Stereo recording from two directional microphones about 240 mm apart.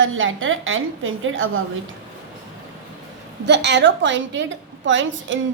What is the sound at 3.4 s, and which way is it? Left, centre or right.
A woman's voice, right.